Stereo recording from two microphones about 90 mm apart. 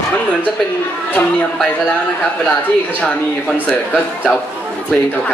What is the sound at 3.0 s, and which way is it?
Speech, 15° left (ahead or behind).